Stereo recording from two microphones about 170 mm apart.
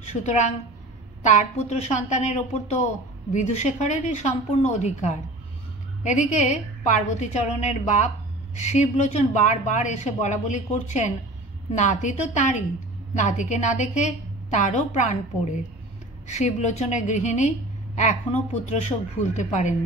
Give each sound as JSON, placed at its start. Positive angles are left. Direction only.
{"t": 0.0, "sound": "a woman's voice", "side_deg": 40}